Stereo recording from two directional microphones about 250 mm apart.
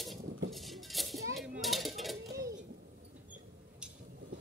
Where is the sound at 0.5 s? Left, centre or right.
Centre.